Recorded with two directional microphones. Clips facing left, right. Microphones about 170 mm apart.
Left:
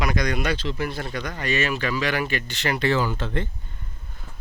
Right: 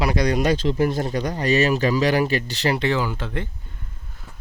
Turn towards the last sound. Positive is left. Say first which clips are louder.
# left 1 dB
turn(degrees=-10)  # may be behind; listen again after turning